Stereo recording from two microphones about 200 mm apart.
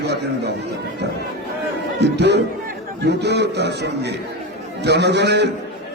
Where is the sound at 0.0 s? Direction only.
55° right (ahead or behind).